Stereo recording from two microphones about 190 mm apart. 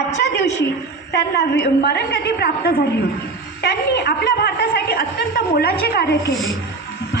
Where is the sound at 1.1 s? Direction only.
60° left (ahead or behind).